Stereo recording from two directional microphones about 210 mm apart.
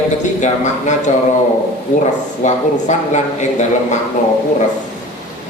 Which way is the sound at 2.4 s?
35° left (ahead or behind).